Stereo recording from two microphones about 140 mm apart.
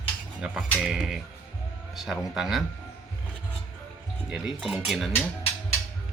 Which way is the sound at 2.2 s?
5° right (ahead or behind).